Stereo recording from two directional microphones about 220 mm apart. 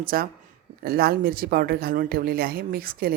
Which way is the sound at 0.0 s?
40° right (ahead or behind).